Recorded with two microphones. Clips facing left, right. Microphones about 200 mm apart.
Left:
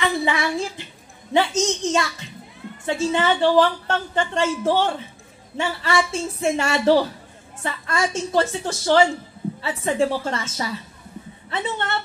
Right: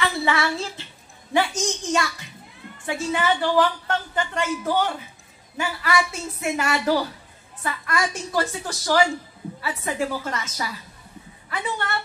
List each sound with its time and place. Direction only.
0.0 s child singing: 20° left (ahead or behind)
1.3 s a woman's voice: 20° left (ahead or behind)